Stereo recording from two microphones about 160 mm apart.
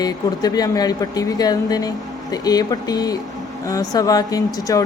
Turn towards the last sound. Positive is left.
turn(degrees=20)  # may be behind; listen again after turning